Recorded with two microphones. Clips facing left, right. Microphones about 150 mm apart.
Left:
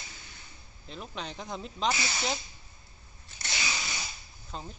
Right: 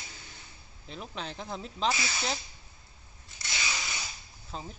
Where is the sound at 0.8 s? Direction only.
Centre (ahead or behind).